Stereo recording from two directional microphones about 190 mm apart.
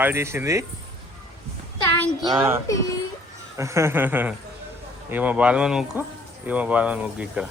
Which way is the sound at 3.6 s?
15° right (ahead or behind).